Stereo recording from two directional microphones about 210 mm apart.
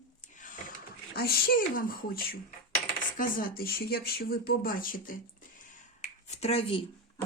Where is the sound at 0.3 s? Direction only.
40° left (ahead or behind).